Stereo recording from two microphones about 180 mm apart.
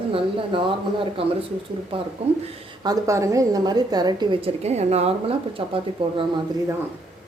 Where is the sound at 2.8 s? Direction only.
20° right (ahead or behind).